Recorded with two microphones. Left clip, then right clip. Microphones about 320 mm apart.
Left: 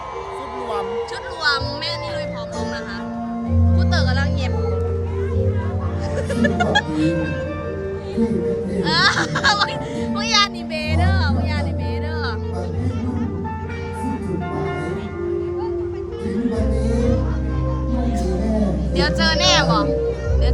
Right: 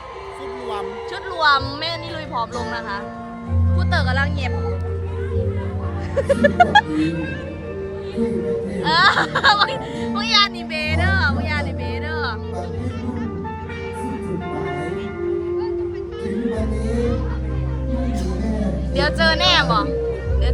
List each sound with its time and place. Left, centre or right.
1.4 s speech: centre
3.8 s music: right
6.1 s speech: centre
8.8 s a child's voice: centre
18.9 s a child's voice: centre